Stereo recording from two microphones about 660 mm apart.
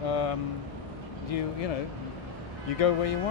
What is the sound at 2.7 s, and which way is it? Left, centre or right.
Speech, left.